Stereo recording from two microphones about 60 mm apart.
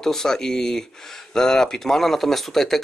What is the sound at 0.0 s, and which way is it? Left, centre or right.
Speech, centre.